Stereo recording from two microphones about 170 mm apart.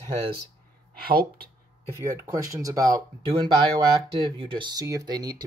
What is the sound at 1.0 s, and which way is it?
Speech, 60° right (ahead or behind).